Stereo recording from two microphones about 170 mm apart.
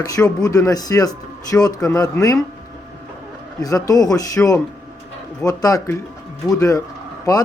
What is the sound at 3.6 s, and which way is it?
A man's voice, 20° left (ahead or behind).